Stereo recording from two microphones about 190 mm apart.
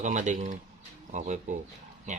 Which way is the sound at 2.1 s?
40° right (ahead or behind).